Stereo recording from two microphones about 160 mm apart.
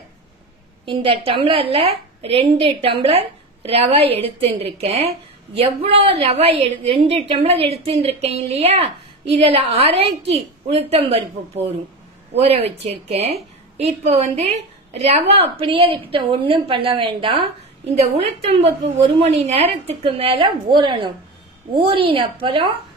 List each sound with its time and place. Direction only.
0.8 s a woman's voice: 35° right (ahead or behind)